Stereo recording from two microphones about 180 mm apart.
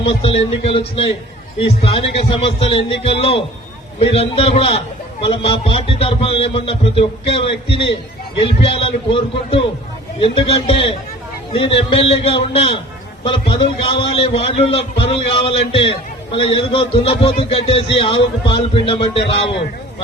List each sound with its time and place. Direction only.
0.0 s a man's voice: 30° left (ahead or behind)